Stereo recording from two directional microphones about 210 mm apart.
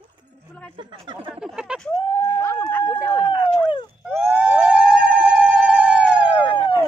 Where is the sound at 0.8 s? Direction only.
20° right (ahead or behind).